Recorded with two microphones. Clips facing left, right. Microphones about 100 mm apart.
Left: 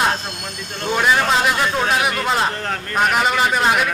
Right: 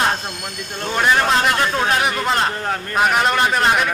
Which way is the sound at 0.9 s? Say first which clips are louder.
Right 1 dB; centre (ahead or behind).